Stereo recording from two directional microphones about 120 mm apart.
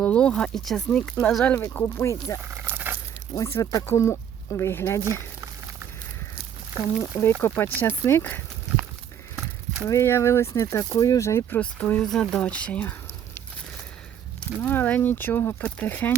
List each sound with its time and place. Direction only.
0.0 s speech: 10° left (ahead or behind)
1.5 s speech: 20° left (ahead or behind)
2.4 s dog: 20° right (ahead or behind)
3.3 s speech: 25° left (ahead or behind)
7.0 s speech: 20° left (ahead or behind)
9.9 s speech: 20° left (ahead or behind)
11.6 s speech: 10° left (ahead or behind)
14.6 s speech: 15° left (ahead or behind)